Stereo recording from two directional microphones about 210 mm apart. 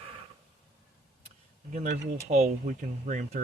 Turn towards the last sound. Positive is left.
turn(degrees=-35)  # may be behind; listen again after turning